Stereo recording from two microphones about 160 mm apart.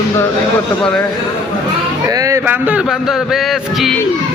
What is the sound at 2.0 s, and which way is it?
A man's voice, 20° right (ahead or behind).